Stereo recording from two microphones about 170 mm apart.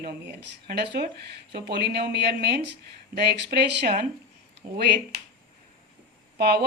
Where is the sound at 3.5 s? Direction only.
60° right (ahead or behind).